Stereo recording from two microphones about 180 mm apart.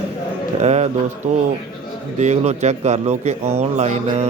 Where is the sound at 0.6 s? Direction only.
40° right (ahead or behind).